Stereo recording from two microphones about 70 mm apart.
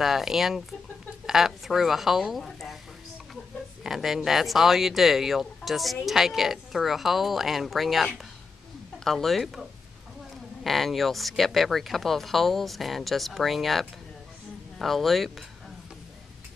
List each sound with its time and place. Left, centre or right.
0.0 s speech: centre
3.8 s speech: centre